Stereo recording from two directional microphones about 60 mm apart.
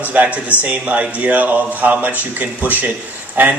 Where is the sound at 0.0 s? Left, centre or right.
Right.